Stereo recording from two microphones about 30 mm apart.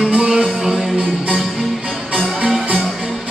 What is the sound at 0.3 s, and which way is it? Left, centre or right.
Music, centre.